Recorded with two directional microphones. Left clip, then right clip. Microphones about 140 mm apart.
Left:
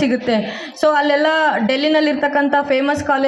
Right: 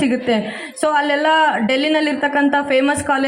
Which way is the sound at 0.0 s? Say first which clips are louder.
Even; 45° left (ahead or behind).